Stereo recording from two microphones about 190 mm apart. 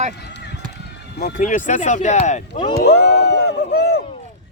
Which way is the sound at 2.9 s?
65° left (ahead or behind).